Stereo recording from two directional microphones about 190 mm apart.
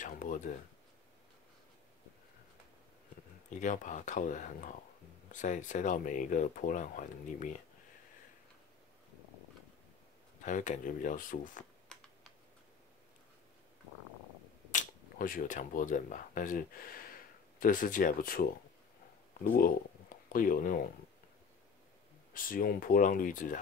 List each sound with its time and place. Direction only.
0.0 s a sound: 45° left (ahead or behind)
3.4 s speech: 40° left (ahead or behind)
10.4 s speech: 40° left (ahead or behind)
11.9 s computer keyboard: 5° left (ahead or behind)
14.7 s speech: 45° left (ahead or behind)
22.3 s speech: 45° left (ahead or behind)